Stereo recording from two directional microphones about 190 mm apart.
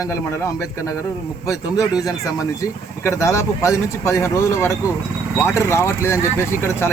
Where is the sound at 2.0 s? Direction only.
15° left (ahead or behind).